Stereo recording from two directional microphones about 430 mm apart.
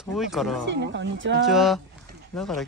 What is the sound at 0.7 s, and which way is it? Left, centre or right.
Speech, right.